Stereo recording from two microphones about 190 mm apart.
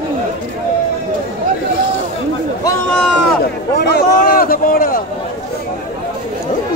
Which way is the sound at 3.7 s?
60° left (ahead or behind).